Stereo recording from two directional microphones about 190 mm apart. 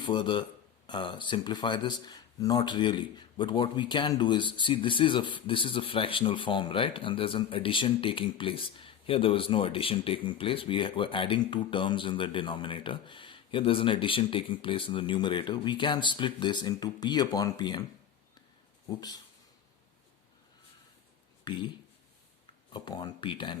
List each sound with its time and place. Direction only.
0.0 s speech: 25° left (ahead or behind)
18.9 s speech: 20° left (ahead or behind)
22.7 s speech: 20° left (ahead or behind)